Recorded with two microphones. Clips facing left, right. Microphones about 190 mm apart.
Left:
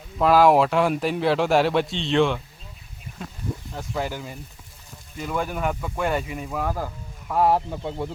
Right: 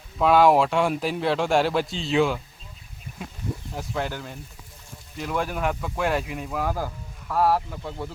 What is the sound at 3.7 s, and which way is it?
Speech, centre (ahead or behind).